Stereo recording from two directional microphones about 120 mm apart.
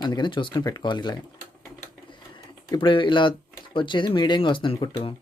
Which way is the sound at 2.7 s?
45° left (ahead or behind).